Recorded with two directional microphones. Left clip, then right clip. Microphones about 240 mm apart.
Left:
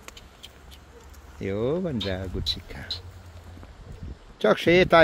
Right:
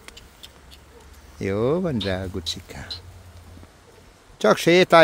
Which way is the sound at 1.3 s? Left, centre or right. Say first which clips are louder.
Right 4 dB; right.